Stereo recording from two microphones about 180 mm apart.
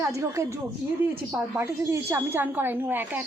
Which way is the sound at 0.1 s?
15° right (ahead or behind).